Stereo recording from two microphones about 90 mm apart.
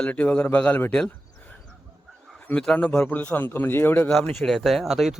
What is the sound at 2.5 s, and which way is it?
A man's voice, 10° left (ahead or behind).